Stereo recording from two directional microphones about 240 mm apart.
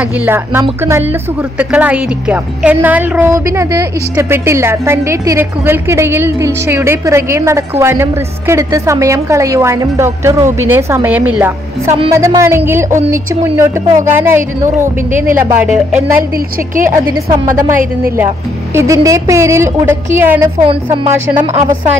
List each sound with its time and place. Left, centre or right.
0.0 s a woman's voice: centre
16.7 s a woman's voice: right
18.7 s a woman's voice: centre
20.6 s speech: right